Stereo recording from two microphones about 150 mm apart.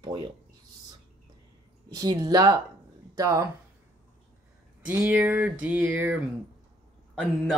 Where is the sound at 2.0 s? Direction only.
25° right (ahead or behind).